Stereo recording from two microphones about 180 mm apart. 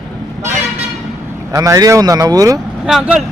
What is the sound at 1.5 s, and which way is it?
A man's voice, 20° right (ahead or behind).